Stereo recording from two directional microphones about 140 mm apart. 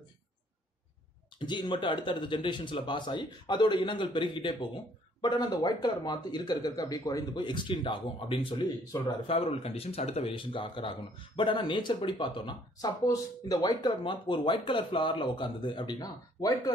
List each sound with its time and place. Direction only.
1.4 s speech: 30° left (ahead or behind)
9.4 s speech: 45° left (ahead or behind)
13.0 s speech: 25° left (ahead or behind)